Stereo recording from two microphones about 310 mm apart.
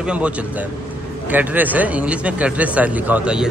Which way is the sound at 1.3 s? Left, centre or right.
Centre.